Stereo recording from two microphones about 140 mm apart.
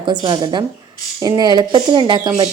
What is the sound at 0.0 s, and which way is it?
Speech, 35° right (ahead or behind).